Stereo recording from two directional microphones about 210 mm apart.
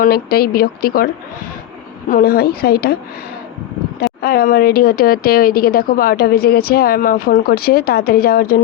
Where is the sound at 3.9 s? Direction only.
45° left (ahead or behind).